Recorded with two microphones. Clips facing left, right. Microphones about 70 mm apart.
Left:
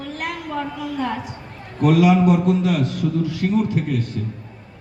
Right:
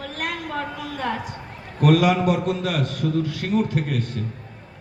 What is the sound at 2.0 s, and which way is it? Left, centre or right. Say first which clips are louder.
A man's voice: left 4 dB; right.